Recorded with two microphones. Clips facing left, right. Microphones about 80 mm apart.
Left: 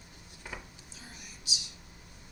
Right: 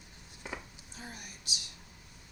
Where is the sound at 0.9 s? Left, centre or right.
Right.